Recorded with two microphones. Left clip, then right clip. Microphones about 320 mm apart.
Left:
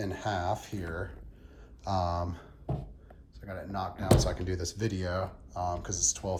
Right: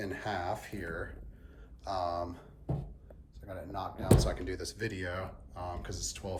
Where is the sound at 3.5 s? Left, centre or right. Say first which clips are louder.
Left 3 dB; left.